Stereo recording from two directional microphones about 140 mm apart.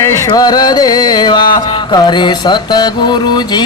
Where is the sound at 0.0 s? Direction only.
25° left (ahead or behind).